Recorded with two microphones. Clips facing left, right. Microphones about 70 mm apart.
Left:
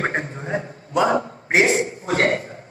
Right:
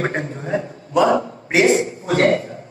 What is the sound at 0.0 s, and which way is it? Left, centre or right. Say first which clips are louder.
Speech: right 1 dB; left.